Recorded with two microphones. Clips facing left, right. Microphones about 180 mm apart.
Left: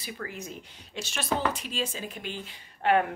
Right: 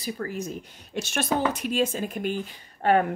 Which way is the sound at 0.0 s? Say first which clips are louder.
Right 7 dB; 40° right (ahead or behind).